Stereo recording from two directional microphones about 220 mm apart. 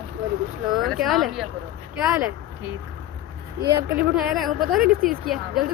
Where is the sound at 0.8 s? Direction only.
Centre (ahead or behind).